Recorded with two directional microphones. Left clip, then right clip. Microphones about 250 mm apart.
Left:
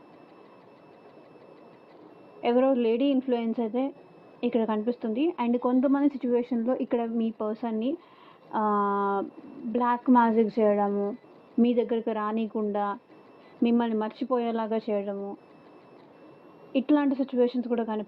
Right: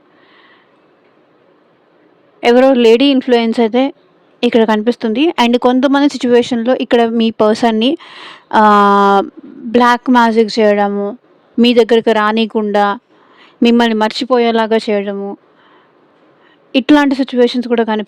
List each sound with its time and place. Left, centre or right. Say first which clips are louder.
2.4 s speech: right 15 dB; right
6.5 s a woman's voice: right 15 dB; right
16.7 s speech: right 14 dB; right